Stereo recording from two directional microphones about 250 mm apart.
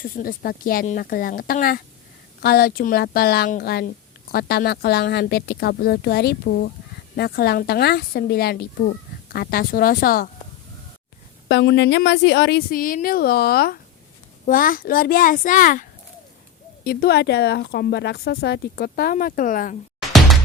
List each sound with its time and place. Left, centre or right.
0.0 s speech: left
11.4 s speech: left
20.0 s music: centre